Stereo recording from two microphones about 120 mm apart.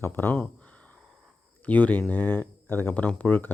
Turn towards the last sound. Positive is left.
turn(degrees=15)  # may be behind; listen again after turning